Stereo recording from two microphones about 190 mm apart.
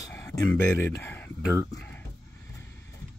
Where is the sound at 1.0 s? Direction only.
10° left (ahead or behind).